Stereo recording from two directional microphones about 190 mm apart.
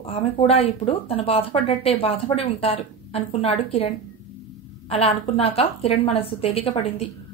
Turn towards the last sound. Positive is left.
turn(degrees=30)  # may be behind; listen again after turning